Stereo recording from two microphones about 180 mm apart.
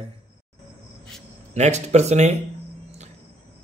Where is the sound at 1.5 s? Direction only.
40° right (ahead or behind).